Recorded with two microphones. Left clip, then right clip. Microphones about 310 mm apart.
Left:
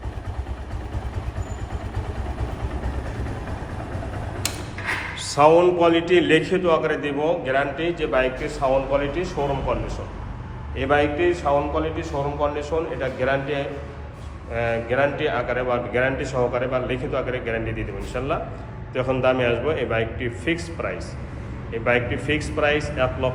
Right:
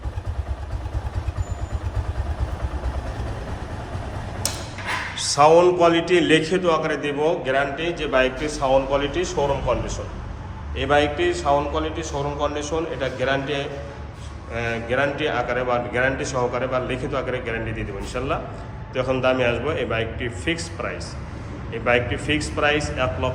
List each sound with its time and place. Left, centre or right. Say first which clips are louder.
5.1 s a man's voice: right 1 dB; centre
10.8 s a man's voice: right 1 dB; centre